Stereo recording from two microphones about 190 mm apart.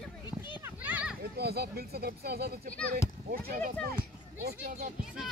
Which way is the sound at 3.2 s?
45° right (ahead or behind).